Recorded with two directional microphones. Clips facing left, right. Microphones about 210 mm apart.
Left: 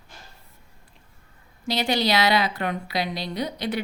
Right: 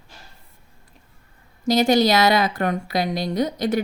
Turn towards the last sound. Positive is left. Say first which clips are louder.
# right 6 dB
turn(degrees=-45)  # may be behind; listen again after turning